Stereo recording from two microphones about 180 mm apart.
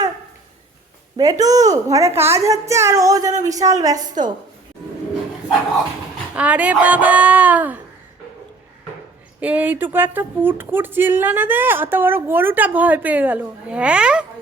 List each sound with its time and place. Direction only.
1.1 s speech: 20° right (ahead or behind)
6.3 s speech: 10° right (ahead or behind)
9.4 s speech: 10° right (ahead or behind)